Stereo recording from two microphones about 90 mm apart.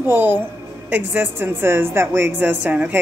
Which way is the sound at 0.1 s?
20° right (ahead or behind).